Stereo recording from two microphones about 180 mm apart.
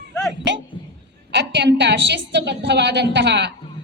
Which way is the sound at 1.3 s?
75° right (ahead or behind).